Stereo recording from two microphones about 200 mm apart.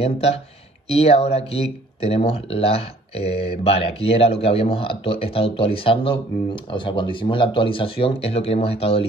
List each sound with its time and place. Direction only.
0.0 s speech: 30° left (ahead or behind)